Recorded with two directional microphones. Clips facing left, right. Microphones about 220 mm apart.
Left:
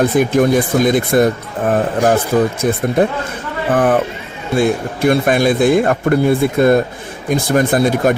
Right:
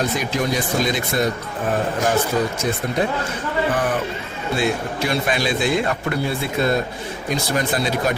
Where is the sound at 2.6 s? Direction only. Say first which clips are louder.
Left 7 dB; 55° left (ahead or behind).